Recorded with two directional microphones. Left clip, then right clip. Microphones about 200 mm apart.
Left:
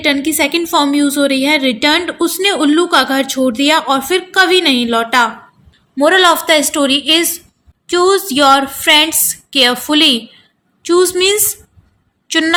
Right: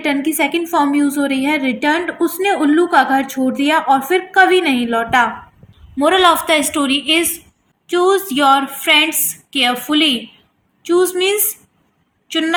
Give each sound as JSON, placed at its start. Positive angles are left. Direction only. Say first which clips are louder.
{"t": 0.0, "sound": "a woman's voice", "louder": "left 3 dB", "side_deg": 40}